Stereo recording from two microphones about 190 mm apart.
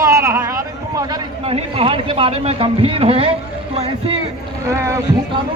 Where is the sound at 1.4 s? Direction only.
30° right (ahead or behind).